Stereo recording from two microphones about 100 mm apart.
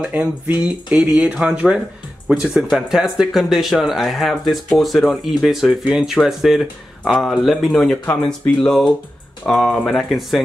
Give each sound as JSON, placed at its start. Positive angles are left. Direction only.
{"t": 0.1, "sound": "speech", "side_deg": -15}